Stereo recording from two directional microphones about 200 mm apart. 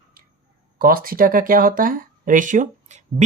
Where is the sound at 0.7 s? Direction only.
45° right (ahead or behind).